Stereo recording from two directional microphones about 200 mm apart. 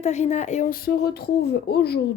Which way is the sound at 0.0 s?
35° left (ahead or behind).